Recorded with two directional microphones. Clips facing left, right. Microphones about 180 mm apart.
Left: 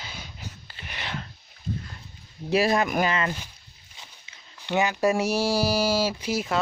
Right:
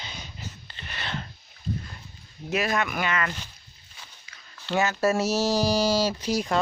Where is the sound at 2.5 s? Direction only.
35° left (ahead or behind).